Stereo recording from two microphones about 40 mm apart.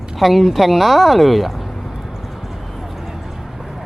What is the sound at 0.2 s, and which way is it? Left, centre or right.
Speech, centre.